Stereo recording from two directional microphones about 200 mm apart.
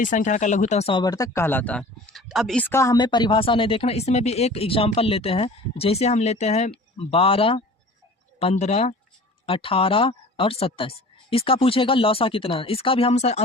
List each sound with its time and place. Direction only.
0.0 s speech: 40° left (ahead or behind)